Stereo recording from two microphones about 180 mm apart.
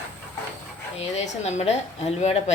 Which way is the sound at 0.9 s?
40° left (ahead or behind).